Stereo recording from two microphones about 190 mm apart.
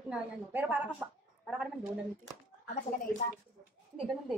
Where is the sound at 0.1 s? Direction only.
10° right (ahead or behind).